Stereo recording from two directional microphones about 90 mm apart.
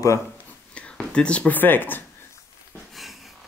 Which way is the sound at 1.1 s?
10° left (ahead or behind).